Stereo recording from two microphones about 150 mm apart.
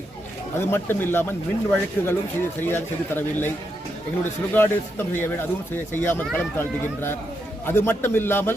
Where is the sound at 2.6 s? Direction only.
15° left (ahead or behind).